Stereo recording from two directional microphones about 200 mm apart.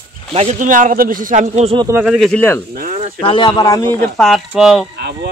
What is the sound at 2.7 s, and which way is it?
Speech, 40° right (ahead or behind).